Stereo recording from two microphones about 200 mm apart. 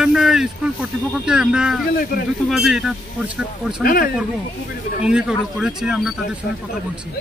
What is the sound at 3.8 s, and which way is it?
Speech, 45° left (ahead or behind).